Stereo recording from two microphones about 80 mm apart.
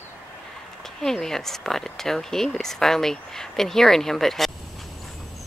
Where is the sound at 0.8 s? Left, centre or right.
Centre.